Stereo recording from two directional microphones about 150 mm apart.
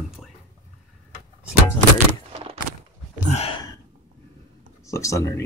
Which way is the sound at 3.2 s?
45° left (ahead or behind).